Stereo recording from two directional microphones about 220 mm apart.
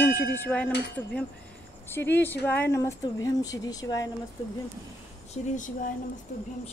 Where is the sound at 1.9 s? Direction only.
10° left (ahead or behind).